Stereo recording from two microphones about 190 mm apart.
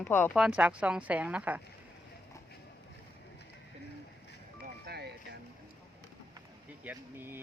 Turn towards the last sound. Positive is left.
turn(degrees=-10)  # may be behind; listen again after turning